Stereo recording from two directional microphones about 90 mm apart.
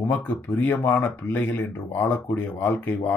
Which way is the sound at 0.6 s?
30° left (ahead or behind).